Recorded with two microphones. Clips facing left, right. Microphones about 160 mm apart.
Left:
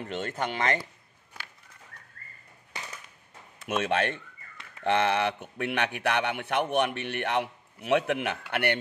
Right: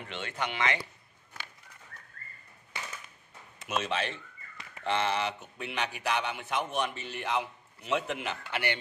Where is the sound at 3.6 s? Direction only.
55° left (ahead or behind).